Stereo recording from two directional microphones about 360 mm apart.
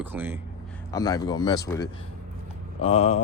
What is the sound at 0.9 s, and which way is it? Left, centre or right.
Speech, centre.